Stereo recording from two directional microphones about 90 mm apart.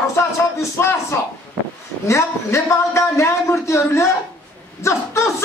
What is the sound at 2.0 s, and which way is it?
A man's voice, 30° left (ahead or behind).